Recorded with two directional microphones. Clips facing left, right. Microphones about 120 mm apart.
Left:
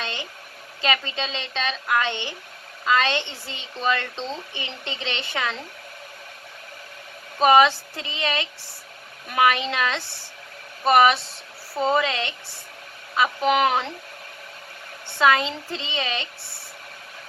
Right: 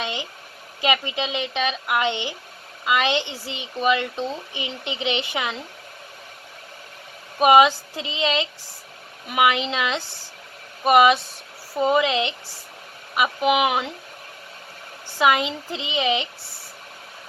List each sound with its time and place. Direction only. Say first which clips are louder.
0.0 s a sound: right 3 dB; 15° right (ahead or behind)
0.8 s a woman's voice: right 2 dB; 15° right (ahead or behind)
7.3 s a woman's voice: right 1 dB; 15° right (ahead or behind)
15.2 s a woman's voice: even; 15° right (ahead or behind)